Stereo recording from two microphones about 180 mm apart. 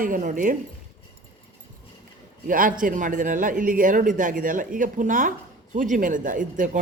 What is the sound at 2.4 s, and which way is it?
Speech, 50° right (ahead or behind).